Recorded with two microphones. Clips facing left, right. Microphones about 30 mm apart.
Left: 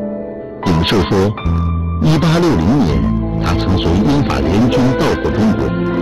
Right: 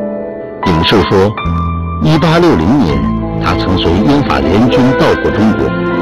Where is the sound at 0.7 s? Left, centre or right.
Right.